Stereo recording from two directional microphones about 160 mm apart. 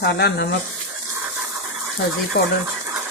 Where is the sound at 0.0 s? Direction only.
90° left.